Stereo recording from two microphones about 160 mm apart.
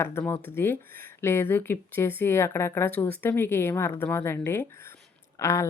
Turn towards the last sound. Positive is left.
turn(degrees=15)  # may be behind; listen again after turning